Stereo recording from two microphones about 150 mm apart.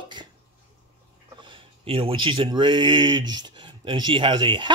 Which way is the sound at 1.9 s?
35° right (ahead or behind).